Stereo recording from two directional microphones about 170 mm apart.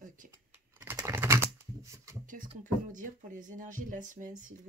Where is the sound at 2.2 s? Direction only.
50° right (ahead or behind).